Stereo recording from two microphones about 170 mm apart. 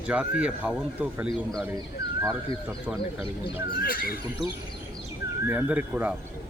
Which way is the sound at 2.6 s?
5° right (ahead or behind).